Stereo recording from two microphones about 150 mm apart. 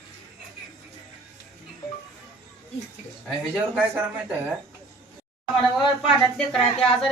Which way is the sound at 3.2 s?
5° right (ahead or behind).